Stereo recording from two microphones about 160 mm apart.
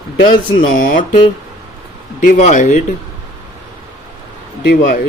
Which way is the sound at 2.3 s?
50° left (ahead or behind).